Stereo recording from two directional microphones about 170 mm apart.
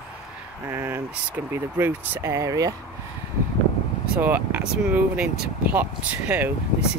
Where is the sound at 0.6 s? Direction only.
15° right (ahead or behind).